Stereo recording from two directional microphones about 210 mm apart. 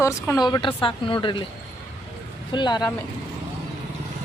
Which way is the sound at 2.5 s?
20° left (ahead or behind).